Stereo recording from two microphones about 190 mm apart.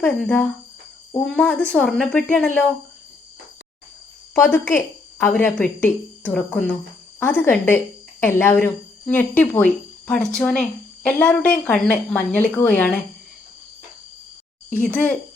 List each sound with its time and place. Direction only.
0.0 s speech: 10° left (ahead or behind)
4.4 s speech: 15° left (ahead or behind)
14.7 s speech: 10° left (ahead or behind)